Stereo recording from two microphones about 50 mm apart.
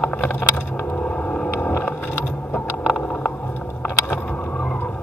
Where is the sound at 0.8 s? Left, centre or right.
Left.